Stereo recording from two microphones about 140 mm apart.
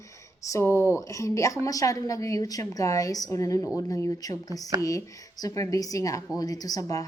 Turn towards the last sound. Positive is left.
turn(degrees=25)  # may be behind; listen again after turning